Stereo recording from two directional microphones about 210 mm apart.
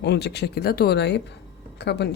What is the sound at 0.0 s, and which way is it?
Speech, 55° left (ahead or behind).